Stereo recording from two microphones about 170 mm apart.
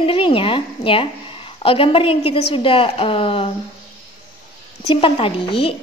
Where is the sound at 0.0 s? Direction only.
35° left (ahead or behind).